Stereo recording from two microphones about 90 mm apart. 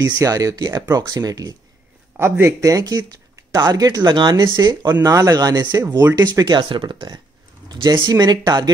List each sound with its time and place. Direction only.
0.0 s speech: 45° right (ahead or behind)
2.1 s speech: 30° right (ahead or behind); by 4.5 s 55° right (ahead or behind)
5.0 s speech: 40° right (ahead or behind)